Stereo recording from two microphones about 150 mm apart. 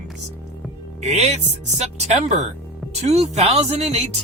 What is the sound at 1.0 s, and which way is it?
Speech, 50° right (ahead or behind).